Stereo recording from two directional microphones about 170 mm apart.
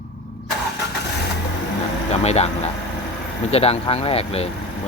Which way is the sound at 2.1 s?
40° left (ahead or behind).